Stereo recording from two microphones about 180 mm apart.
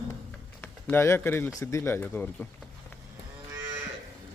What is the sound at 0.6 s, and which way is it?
Speech, 15° left (ahead or behind).